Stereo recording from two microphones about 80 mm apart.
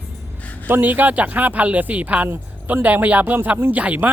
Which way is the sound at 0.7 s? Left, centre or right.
Right.